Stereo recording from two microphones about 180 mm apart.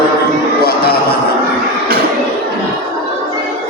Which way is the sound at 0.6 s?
60° left (ahead or behind).